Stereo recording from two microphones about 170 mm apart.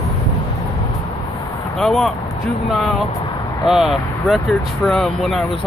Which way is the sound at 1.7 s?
Centre (ahead or behind).